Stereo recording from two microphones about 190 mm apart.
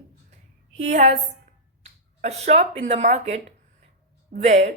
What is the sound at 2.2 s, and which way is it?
Speech, 35° right (ahead or behind).